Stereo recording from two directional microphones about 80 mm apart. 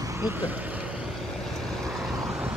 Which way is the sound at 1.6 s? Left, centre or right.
Centre.